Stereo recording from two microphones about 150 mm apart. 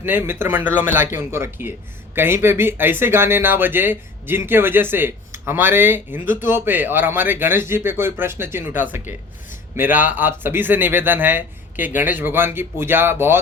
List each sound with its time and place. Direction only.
0.0 s speech: 15° right (ahead or behind)